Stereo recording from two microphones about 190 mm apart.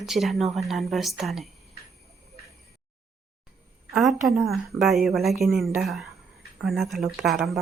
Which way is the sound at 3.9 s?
Centre (ahead or behind).